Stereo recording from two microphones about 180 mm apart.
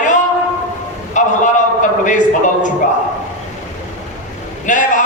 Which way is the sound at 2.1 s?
45° left (ahead or behind).